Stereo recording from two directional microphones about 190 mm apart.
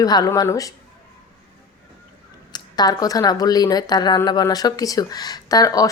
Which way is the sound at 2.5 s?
20° left (ahead or behind).